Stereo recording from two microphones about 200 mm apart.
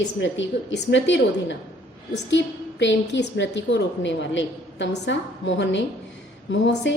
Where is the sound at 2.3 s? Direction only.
65° left (ahead or behind).